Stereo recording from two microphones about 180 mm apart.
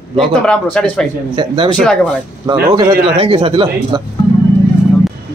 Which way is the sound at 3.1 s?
30° right (ahead or behind).